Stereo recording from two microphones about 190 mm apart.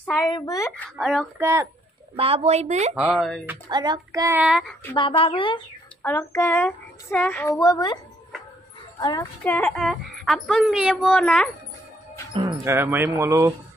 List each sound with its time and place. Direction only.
0.2 s a woman's voice: 20° left (ahead or behind)
0.8 s speech: centre (ahead or behind)
1.4 s speech: 15° right (ahead or behind)
2.1 s speech: 30° right (ahead or behind)
3.0 s speech: 5° right (ahead or behind)
3.6 s child singing: 25° right (ahead or behind)
4.4 s speech: 5° right (ahead or behind)
4.9 s a woman's voice: 25° left (ahead or behind)
6.0 s a woman's voice: 10° left (ahead or behind)
9.2 s speech: 10° left (ahead or behind)
12.4 s speech: 15° right (ahead or behind)